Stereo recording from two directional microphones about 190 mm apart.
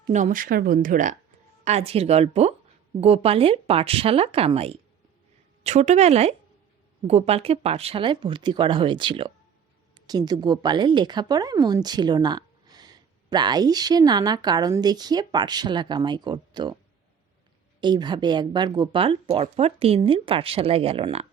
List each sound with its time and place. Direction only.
0.1 s speech: 40° right (ahead or behind)
1.6 s a woman's voice: 35° right (ahead or behind)
17.7 s a woman's voice: 25° right (ahead or behind)